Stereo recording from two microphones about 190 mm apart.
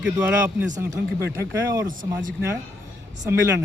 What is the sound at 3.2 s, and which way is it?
Speech, 15° right (ahead or behind).